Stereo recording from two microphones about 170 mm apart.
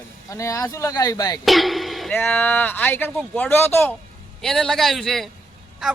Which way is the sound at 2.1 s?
10° left (ahead or behind).